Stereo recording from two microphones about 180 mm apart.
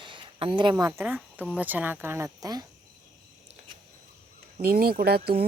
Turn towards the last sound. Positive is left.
turn(degrees=-60)  # may be behind; listen again after turning